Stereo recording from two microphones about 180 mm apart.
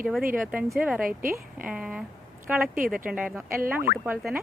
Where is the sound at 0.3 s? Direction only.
5° right (ahead or behind).